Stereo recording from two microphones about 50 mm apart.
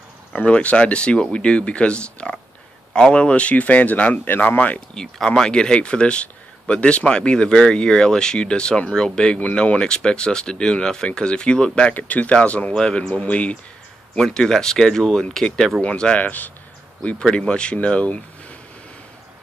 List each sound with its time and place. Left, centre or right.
0.3 s speech: left
4.9 s speech: centre
11.9 s speech: left
14.1 s speech: centre
16.2 s speech: left
17.2 s speech: centre